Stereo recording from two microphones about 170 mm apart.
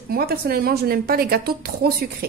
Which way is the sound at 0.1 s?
65° right (ahead or behind).